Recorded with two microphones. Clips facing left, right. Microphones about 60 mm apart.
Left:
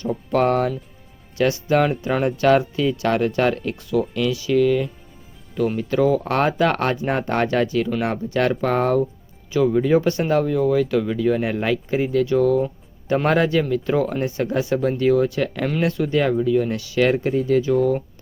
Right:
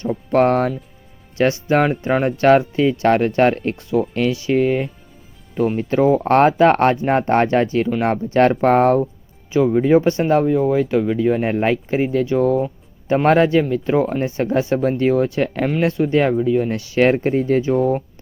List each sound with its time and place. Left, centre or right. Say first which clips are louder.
0.0 s speech: right 4 dB; right
9.5 s speech: right 3 dB; right